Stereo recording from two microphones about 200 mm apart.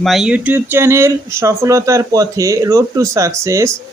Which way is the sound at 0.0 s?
Centre (ahead or behind).